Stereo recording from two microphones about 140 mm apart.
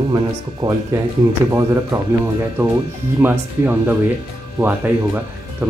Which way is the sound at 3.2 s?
10° right (ahead or behind).